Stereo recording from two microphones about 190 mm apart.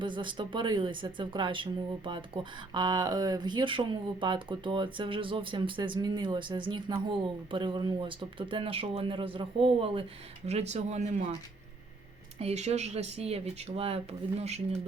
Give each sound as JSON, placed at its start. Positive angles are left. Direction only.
{"t": 0.0, "sound": "speech", "side_deg": -25}
{"t": 12.4, "sound": "speech", "side_deg": -35}